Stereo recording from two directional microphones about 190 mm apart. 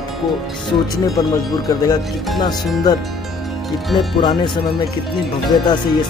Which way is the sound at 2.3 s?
20° left (ahead or behind).